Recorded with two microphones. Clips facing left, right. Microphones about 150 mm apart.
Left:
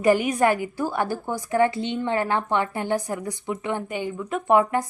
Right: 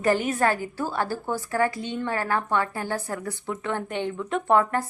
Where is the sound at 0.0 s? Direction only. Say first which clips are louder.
Left 3 dB; 15° left (ahead or behind).